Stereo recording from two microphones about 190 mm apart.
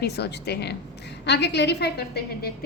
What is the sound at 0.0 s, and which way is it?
A woman's voice, 60° left (ahead or behind).